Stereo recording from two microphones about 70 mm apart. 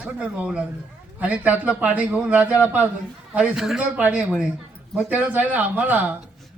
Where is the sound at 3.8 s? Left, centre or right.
Right.